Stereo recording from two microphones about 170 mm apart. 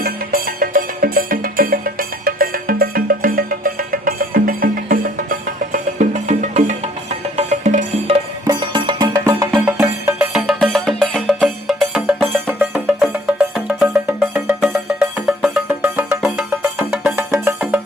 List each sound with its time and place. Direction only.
0.0 s music: 60° right (ahead or behind)
8.4 s music: 25° right (ahead or behind)
9.6 s music: 10° right (ahead or behind)